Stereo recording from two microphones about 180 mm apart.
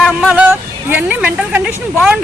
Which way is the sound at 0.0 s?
5° right (ahead or behind).